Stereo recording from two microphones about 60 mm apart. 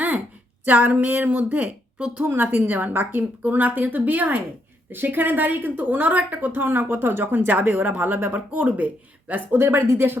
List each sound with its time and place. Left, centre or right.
0.6 s a woman's voice: right
2.2 s a woman's voice: right
9.6 s a woman's voice: right